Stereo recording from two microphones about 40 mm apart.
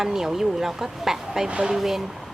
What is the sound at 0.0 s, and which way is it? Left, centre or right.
A woman's voice, centre.